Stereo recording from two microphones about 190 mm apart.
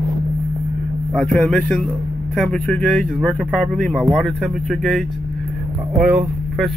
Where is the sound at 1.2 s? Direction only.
5° left (ahead or behind).